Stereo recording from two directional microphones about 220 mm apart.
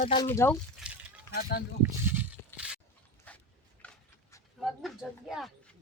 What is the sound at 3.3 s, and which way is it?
Dog, 5° left (ahead or behind).